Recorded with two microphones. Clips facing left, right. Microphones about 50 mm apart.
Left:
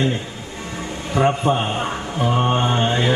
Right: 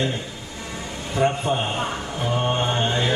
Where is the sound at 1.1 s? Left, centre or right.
Left.